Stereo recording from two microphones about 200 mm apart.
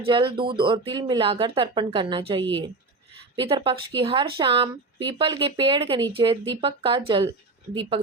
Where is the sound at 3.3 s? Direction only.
25° right (ahead or behind).